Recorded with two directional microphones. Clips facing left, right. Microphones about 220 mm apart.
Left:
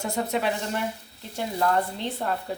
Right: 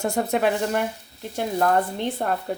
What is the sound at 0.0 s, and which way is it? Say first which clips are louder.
Speech: right 4 dB; 50° right (ahead or behind).